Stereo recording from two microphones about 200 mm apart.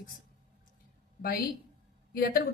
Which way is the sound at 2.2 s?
50° left (ahead or behind).